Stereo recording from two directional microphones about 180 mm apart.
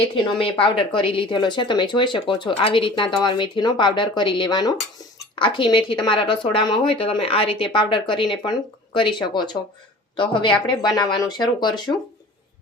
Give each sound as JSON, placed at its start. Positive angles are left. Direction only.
{"t": 0.0, "sound": "speech", "side_deg": 30}